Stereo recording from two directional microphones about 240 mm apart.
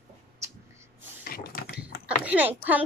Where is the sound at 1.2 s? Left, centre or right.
Left.